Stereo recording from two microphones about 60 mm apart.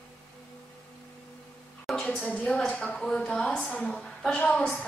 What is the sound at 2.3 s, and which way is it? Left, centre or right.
A woman's voice, left.